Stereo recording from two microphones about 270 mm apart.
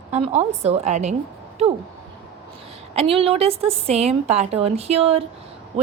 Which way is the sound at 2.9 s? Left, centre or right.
Right.